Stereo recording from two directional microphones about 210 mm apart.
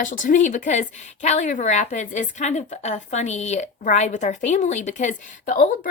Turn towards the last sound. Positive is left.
turn(degrees=35)  # may be behind; listen again after turning